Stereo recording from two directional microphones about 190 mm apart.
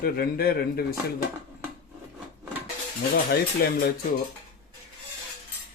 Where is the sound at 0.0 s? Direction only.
55° left (ahead or behind).